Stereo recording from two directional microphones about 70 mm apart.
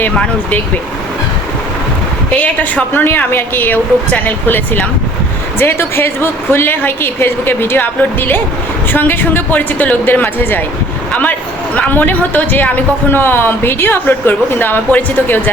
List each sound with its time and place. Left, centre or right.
2.4 s a woman's voice: left